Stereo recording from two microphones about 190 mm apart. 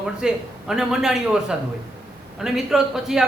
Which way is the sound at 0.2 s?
5° right (ahead or behind).